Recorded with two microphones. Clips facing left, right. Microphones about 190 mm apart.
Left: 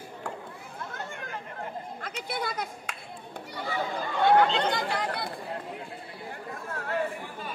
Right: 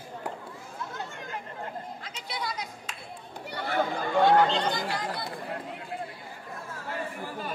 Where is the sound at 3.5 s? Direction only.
65° right (ahead or behind).